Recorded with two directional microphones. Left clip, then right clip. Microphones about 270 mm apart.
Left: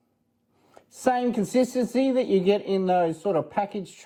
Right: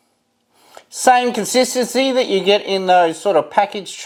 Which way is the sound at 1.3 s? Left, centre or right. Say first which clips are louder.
Right 8 dB; centre.